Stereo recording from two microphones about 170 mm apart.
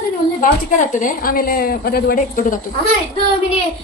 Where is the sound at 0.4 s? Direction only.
50° left (ahead or behind).